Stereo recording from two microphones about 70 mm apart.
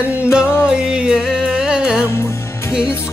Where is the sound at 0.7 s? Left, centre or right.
Centre.